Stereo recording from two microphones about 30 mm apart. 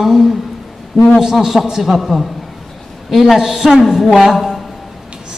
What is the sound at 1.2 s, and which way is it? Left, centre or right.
A man's voice, centre.